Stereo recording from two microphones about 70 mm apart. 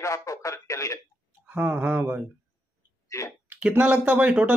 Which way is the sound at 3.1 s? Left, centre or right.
Left.